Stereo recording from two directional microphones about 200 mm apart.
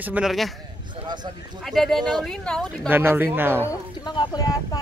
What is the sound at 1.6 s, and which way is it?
Speech, centre (ahead or behind).